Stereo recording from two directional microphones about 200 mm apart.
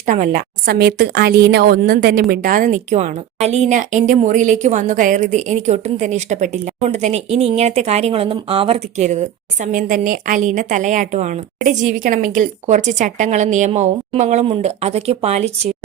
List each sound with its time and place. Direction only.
0.0 s a woman's voice: 40° right (ahead or behind)